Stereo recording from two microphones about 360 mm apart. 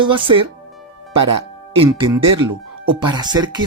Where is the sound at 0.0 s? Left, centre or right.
Centre.